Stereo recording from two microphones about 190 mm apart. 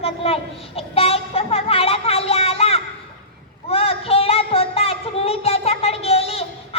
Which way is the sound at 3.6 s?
30° left (ahead or behind).